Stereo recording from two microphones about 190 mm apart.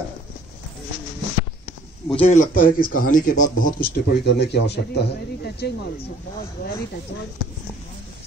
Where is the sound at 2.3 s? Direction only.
45° left (ahead or behind).